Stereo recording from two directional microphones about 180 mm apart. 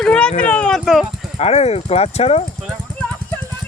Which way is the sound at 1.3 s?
35° left (ahead or behind).